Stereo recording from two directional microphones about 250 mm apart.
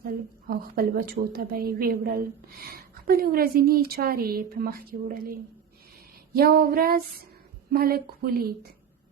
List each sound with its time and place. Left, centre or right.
0.4 s a woman's voice: right